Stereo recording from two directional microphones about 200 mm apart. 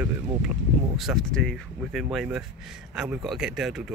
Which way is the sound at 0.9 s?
Centre (ahead or behind).